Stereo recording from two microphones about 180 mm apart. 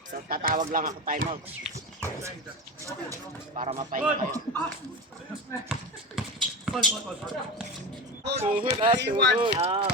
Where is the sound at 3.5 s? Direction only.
35° right (ahead or behind).